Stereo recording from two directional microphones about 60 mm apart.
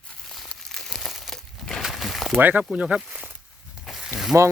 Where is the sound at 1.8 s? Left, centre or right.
Centre.